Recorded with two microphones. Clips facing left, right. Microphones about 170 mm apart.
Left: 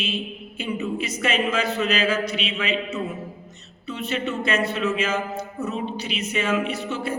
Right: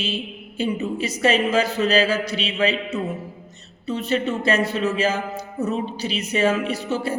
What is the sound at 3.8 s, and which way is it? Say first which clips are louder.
A man's voice: right 4 dB; 35° right (ahead or behind).